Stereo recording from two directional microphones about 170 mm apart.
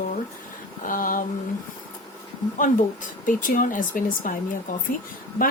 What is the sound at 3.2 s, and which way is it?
Speech, 50° left (ahead or behind).